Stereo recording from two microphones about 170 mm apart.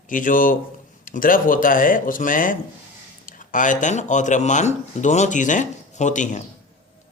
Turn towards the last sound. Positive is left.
turn(degrees=45)  # may be behind; listen again after turning